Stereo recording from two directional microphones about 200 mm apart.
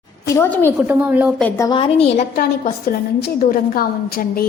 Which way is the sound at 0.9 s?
10° right (ahead or behind).